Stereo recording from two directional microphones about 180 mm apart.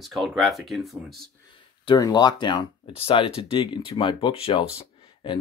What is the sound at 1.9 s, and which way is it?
Speech, 25° left (ahead or behind).